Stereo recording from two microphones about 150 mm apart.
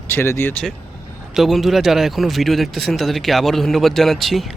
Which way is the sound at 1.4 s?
Centre (ahead or behind).